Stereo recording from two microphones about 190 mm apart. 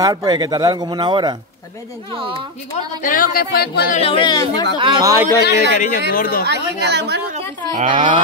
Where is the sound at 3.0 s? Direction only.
50° left (ahead or behind).